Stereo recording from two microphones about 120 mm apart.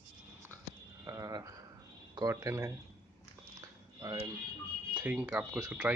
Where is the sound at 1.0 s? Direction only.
30° right (ahead or behind).